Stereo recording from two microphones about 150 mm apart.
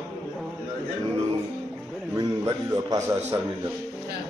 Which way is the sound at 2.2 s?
20° right (ahead or behind).